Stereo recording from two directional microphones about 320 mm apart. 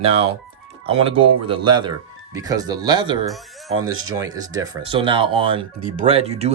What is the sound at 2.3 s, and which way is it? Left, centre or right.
Speech, centre.